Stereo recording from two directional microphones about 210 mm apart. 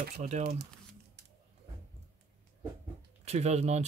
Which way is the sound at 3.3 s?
30° right (ahead or behind).